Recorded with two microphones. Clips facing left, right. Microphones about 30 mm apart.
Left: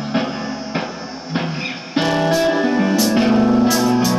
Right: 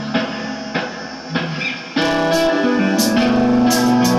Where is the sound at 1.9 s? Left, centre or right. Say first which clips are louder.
Even; centre.